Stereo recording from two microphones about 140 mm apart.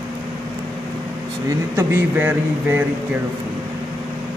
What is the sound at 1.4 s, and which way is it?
Speech, 20° right (ahead or behind).